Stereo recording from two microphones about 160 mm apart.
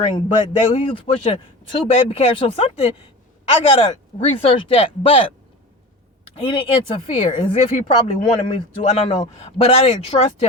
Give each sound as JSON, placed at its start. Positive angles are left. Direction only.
{"t": 0.0, "sound": "speech", "side_deg": 35}
{"t": 6.3, "sound": "speech", "side_deg": 35}